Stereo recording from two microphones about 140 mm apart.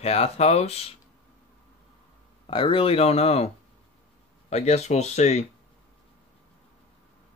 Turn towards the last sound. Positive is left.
turn(degrees=55)  # may be behind; listen again after turning